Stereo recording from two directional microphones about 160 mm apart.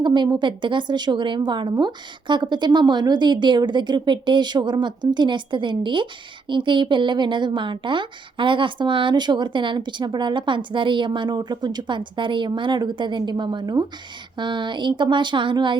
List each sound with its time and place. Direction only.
0.0 s a woman's voice: 30° right (ahead or behind)